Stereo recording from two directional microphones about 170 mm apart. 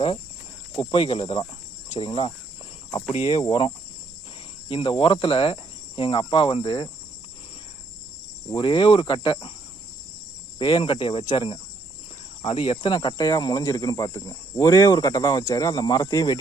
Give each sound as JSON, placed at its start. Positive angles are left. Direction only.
{"t": 0.8, "sound": "speech", "side_deg": 30}
{"t": 4.7, "sound": "speech", "side_deg": 30}
{"t": 6.0, "sound": "cricket", "side_deg": 30}
{"t": 8.4, "sound": "cricket", "side_deg": 25}
{"t": 10.6, "sound": "cricket", "side_deg": 30}